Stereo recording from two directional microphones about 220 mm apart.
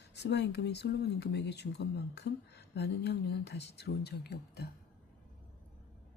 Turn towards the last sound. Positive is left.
turn(degrees=45)  # may be behind; listen again after turning